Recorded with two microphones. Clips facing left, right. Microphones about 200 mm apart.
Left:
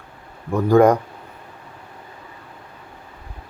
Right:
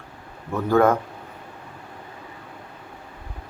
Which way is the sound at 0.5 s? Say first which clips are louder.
Left 5 dB; 15° left (ahead or behind).